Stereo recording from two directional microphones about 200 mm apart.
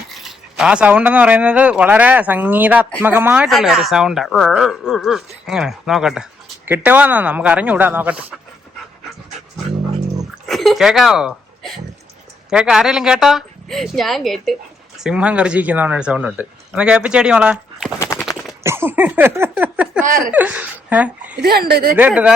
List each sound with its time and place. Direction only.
0.1 s speech: centre (ahead or behind)
10.4 s speech: centre (ahead or behind)
18.0 s a sound: 15° left (ahead or behind)
18.6 s speech: 10° right (ahead or behind)
21.4 s a woman's voice: 50° right (ahead or behind)
21.9 s speech: 5° right (ahead or behind)